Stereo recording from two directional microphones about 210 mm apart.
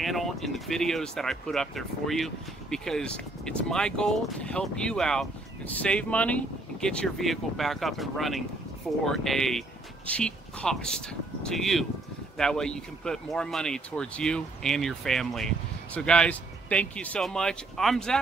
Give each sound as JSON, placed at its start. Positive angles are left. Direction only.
{"t": 0.0, "sound": "speech", "side_deg": 0}